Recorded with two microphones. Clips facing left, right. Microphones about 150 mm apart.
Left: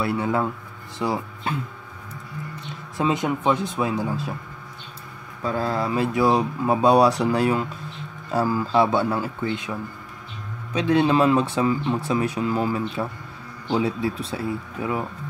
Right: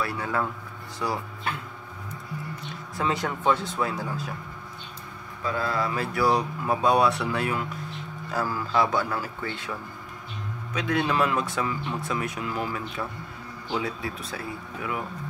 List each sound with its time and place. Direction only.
0.0 s speech: 25° left (ahead or behind)
3.0 s speech: 20° left (ahead or behind)
5.4 s speech: 40° left (ahead or behind)
5.8 s speech: 20° left (ahead or behind)
8.3 s speech: 25° left (ahead or behind)
10.7 s speech: 30° left (ahead or behind)